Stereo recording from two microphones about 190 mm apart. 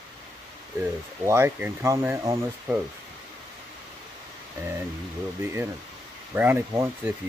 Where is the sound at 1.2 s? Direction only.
15° right (ahead or behind).